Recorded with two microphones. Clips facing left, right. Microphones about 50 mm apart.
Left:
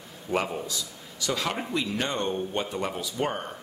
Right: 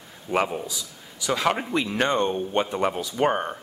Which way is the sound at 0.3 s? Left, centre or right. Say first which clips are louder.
Right 4 dB; right.